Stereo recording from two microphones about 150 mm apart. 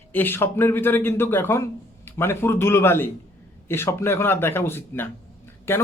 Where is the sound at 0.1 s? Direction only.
15° left (ahead or behind).